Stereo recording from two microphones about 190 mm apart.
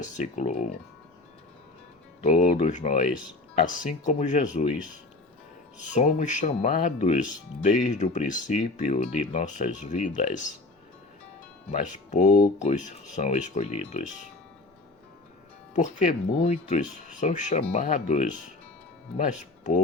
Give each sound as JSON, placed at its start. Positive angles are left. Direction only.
{"t": 0.0, "sound": "speech", "side_deg": 40}
{"t": 2.2, "sound": "speech", "side_deg": 40}
{"t": 11.7, "sound": "speech", "side_deg": 40}
{"t": 15.7, "sound": "speech", "side_deg": 40}